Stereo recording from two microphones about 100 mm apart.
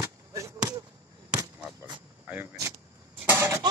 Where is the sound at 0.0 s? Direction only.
30° right (ahead or behind).